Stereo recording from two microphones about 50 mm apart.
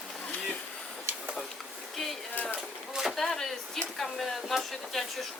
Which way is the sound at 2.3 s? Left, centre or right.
Left.